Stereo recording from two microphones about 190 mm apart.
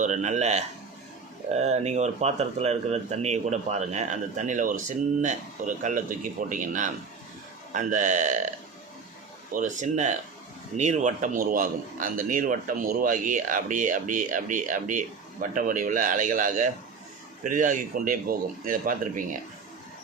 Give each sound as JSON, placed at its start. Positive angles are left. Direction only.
{"t": 0.0, "sound": "a man's voice", "side_deg": -40}